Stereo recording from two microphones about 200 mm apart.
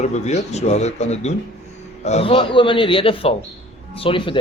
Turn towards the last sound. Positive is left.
turn(degrees=25)  # may be behind; listen again after turning